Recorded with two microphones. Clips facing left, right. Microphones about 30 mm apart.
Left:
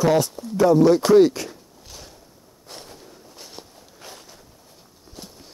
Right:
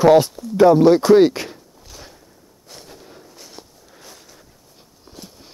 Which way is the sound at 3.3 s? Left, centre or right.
Centre.